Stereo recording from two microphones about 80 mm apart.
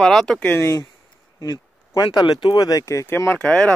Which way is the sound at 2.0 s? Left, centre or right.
Left.